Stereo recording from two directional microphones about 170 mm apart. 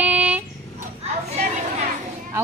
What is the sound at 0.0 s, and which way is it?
Dog, 10° right (ahead or behind).